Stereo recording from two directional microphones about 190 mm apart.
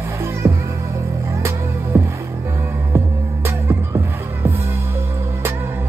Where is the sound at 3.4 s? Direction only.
15° right (ahead or behind).